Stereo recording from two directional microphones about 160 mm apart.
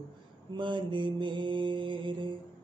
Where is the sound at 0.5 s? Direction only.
30° right (ahead or behind).